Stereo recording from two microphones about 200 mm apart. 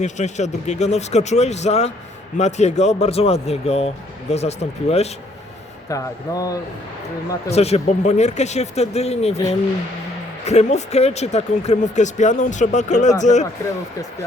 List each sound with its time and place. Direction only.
0.0 s speech: 35° left (ahead or behind)
5.9 s speech: 15° left (ahead or behind)
7.5 s speech: 30° left (ahead or behind)
10.4 s speech: 35° left (ahead or behind)